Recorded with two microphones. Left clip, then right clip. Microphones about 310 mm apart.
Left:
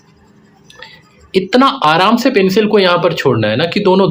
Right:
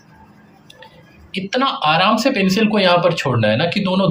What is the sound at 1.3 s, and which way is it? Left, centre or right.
Speech, centre.